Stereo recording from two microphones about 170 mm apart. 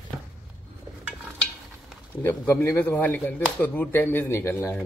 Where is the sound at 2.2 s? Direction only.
10° left (ahead or behind).